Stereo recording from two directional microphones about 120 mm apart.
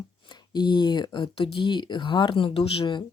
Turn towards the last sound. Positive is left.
turn(degrees=45)  # may be behind; listen again after turning